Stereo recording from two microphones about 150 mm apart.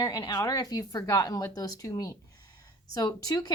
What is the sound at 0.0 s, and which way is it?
Speech, 25° left (ahead or behind).